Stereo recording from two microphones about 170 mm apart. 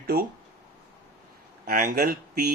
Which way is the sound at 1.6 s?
55° right (ahead or behind).